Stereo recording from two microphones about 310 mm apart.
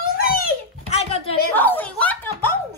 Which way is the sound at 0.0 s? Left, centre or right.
Left.